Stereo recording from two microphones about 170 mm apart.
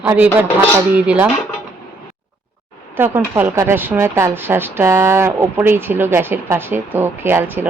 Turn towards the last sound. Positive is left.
turn(degrees=-10)  # may be behind; listen again after turning